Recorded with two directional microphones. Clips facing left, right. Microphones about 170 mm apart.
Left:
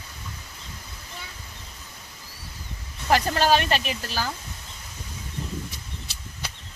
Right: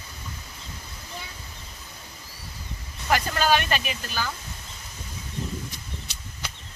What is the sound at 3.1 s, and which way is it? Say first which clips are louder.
Speech: left 2 dB; 35° left (ahead or behind).